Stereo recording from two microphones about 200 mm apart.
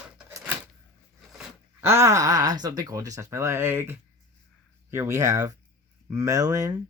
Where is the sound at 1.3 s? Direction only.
10° right (ahead or behind).